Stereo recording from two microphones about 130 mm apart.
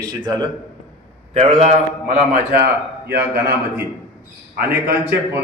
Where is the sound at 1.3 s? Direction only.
50° right (ahead or behind).